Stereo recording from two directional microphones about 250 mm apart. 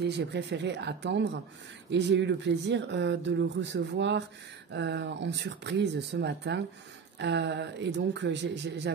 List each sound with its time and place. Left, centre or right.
0.0 s speech: right